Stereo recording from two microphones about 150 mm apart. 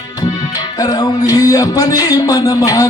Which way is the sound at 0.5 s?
25° left (ahead or behind).